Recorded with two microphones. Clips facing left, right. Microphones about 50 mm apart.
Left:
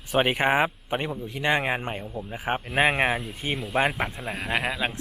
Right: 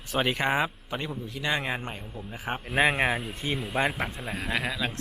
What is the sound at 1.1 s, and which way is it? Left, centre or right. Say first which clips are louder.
Speech: left 3 dB; centre.